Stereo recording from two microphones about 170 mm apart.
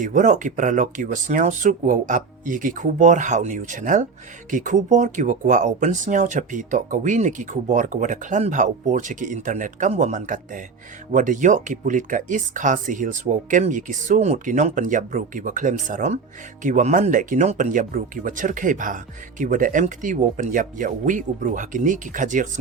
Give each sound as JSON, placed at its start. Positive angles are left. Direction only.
{"t": 0.0, "sound": "speech", "side_deg": -50}